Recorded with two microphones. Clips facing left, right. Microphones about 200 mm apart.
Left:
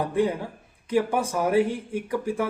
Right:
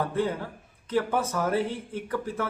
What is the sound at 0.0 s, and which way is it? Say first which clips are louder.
Speech: left 3 dB; 15° left (ahead or behind).